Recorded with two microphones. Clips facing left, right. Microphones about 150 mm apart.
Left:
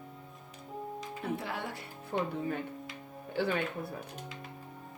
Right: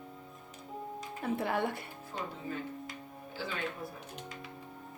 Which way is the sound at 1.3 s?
55° right (ahead or behind).